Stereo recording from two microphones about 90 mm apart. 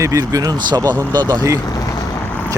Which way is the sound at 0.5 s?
50° right (ahead or behind).